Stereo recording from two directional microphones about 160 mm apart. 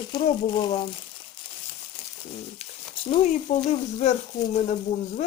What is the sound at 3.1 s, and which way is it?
Speech, 45° left (ahead or behind).